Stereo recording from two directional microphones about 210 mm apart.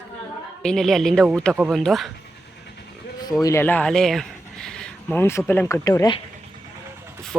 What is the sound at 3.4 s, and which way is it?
Speech, 15° left (ahead or behind).